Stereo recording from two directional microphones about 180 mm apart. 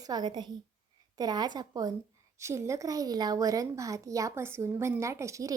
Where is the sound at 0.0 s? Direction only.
20° right (ahead or behind).